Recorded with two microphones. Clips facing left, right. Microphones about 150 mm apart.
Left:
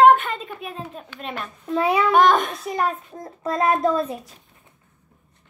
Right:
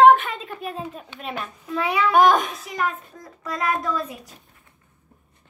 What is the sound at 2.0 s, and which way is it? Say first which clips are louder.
Speech: right 3 dB; centre (ahead or behind).